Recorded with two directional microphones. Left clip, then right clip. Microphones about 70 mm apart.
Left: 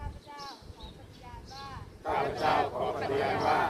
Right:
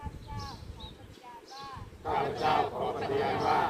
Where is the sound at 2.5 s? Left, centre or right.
Centre.